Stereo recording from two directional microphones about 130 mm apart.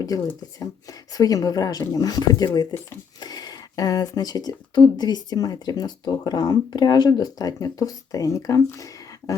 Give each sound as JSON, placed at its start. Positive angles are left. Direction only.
{"t": 0.6, "sound": "speech", "side_deg": 30}